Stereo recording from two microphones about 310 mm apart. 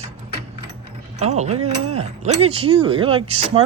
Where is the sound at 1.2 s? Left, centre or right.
Right.